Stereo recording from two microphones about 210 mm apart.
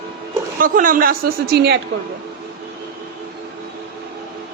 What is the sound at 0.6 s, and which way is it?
A woman's voice, 40° right (ahead or behind).